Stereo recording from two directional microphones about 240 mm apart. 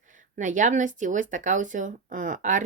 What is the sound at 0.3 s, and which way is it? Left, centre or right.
Speech, right.